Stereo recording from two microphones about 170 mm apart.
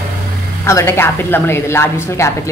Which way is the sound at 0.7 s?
15° left (ahead or behind).